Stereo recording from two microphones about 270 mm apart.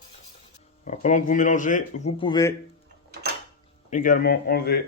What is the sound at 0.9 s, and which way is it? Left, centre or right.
Speech, left.